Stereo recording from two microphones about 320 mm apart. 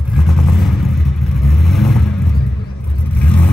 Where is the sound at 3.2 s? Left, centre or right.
Centre.